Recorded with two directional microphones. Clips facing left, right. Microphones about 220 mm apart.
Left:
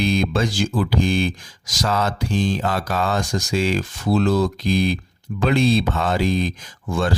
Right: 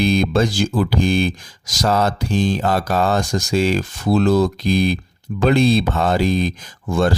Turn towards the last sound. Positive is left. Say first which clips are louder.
# right 4 dB
turn(degrees=-40)  # may be behind; listen again after turning